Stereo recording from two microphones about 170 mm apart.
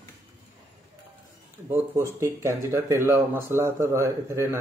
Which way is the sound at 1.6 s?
15° right (ahead or behind).